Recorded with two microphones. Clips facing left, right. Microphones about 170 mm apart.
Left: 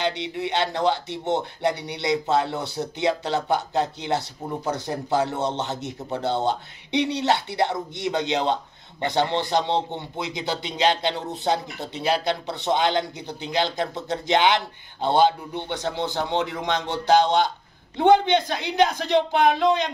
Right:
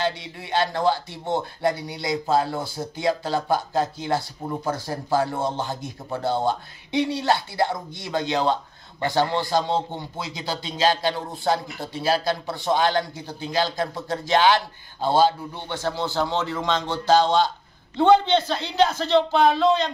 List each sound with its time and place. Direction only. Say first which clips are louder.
0.0 s a man's voice: left 2 dB; 20° left (ahead or behind)